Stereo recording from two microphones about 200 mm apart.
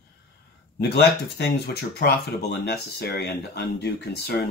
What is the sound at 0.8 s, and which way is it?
Speech, 55° left (ahead or behind).